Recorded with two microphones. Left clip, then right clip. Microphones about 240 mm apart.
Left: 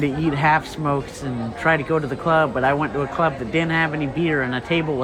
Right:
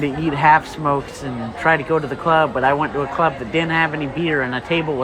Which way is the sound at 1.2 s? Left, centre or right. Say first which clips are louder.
Right 2 dB; centre.